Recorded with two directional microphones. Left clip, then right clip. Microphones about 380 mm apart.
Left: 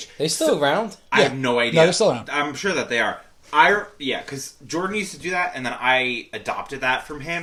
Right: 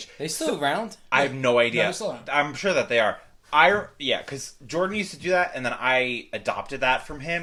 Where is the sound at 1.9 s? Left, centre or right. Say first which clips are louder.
Left 10 dB; left.